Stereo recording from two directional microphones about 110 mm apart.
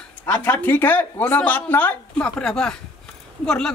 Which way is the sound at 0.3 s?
15° left (ahead or behind).